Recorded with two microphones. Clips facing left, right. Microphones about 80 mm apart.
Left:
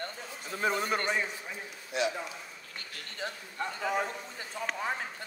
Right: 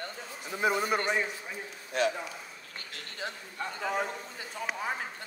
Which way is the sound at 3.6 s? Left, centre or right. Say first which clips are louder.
Left 1 dB; centre.